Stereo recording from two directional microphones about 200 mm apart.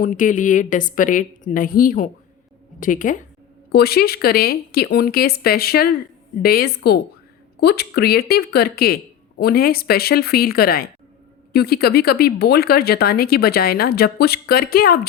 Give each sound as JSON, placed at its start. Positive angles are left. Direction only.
{"t": 0.0, "sound": "a woman's voice", "side_deg": 40}
{"t": 3.7, "sound": "speech", "side_deg": 50}